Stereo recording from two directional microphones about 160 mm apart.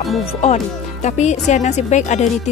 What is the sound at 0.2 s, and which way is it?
Speech, 45° left (ahead or behind).